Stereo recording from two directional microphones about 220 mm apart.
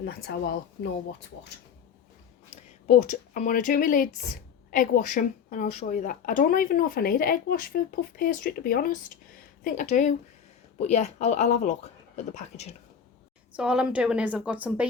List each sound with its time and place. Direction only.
0.0 s speech: 45° left (ahead or behind)
2.8 s speech: 35° left (ahead or behind)
13.6 s a woman's voice: 5° right (ahead or behind)